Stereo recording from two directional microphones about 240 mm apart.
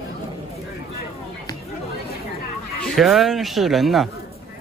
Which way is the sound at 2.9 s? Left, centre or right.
Centre.